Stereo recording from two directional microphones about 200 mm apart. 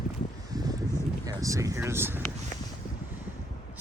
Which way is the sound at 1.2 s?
15° right (ahead or behind).